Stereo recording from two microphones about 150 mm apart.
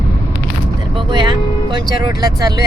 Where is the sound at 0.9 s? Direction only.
30° right (ahead or behind).